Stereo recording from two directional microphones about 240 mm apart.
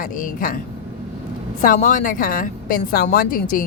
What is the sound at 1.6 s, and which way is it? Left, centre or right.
A woman's voice, left.